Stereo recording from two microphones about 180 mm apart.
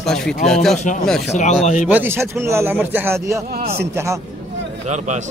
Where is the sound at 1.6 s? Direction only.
40° left (ahead or behind).